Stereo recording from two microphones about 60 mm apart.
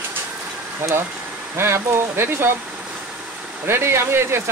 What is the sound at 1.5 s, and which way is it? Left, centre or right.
Speech, right.